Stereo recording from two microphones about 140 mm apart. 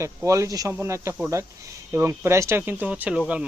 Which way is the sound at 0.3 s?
25° right (ahead or behind).